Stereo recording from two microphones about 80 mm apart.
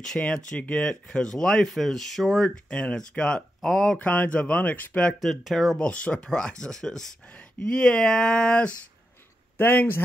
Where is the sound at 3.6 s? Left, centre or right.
Centre.